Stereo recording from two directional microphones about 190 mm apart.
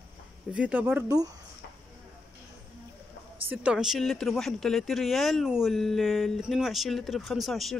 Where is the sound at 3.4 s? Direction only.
10° right (ahead or behind).